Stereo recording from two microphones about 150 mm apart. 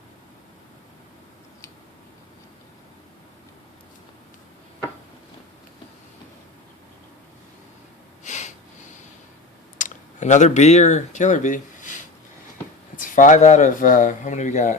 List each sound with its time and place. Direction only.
8.2 s a sound: 50° left (ahead or behind)
9.7 s speech: 55° left (ahead or behind)
13.0 s speech: 65° left (ahead or behind)